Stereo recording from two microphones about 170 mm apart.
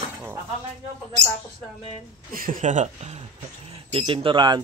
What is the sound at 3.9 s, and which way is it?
Speech, 30° right (ahead or behind).